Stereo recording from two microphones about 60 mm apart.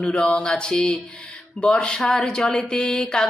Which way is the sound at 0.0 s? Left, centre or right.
Centre.